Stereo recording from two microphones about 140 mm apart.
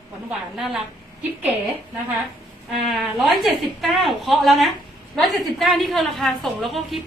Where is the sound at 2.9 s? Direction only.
Centre (ahead or behind).